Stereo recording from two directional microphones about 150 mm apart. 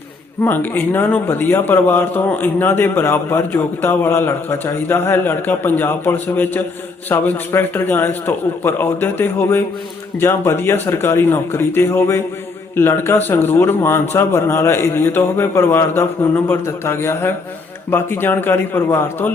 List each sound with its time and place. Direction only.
0.4 s a man's voice: 15° left (ahead or behind)